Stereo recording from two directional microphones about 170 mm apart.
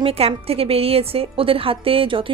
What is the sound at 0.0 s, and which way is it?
Speech, 35° right (ahead or behind).